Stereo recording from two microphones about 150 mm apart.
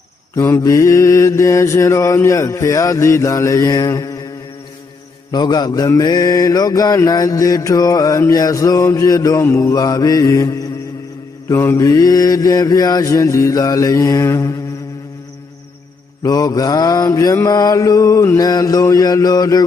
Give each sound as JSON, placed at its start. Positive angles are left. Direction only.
{"t": 0.3, "sound": "mantra", "side_deg": 20}
{"t": 5.3, "sound": "mantra", "side_deg": 30}
{"t": 16.2, "sound": "mantra", "side_deg": 25}